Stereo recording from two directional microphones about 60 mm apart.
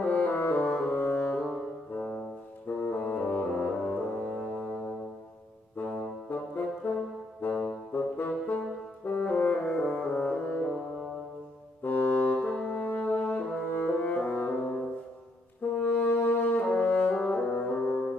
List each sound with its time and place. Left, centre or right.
0.0 s music: left
2.8 s music: left
6.3 s brass instrument: left
9.8 s music: centre
11.8 s music: left
12.6 s french horn: left
15.7 s brass instrument: left